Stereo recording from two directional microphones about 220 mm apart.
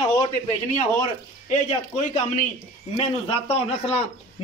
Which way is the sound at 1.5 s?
30° left (ahead or behind).